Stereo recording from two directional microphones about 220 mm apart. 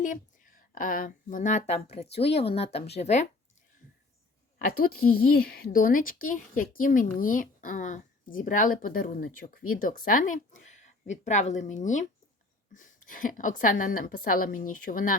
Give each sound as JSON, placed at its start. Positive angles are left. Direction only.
{"t": 0.0, "sound": "speech", "side_deg": 35}
{"t": 4.5, "sound": "a woman's voice", "side_deg": 40}